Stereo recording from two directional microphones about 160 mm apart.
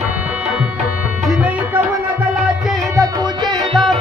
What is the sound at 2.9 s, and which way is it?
Music, 25° right (ahead or behind).